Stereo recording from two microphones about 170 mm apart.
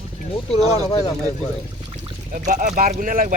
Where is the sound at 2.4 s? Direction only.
50° right (ahead or behind).